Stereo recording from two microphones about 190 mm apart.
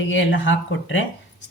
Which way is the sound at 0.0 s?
80° left.